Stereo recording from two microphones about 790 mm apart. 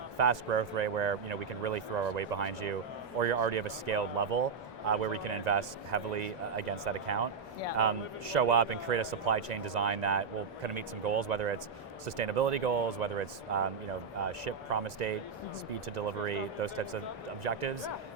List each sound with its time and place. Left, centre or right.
0.2 s speech: right
16.2 s speech: right